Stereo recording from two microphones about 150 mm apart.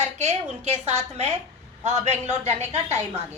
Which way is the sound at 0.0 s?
50° right (ahead or behind).